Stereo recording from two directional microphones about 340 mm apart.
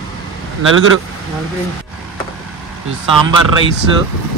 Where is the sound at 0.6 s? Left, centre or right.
Right.